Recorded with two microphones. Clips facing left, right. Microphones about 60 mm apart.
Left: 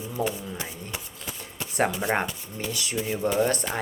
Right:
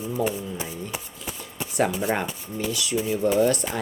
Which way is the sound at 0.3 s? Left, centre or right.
Centre.